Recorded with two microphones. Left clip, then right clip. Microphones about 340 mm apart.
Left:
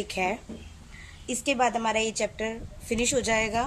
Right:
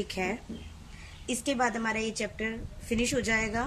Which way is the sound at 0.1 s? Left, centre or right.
Centre.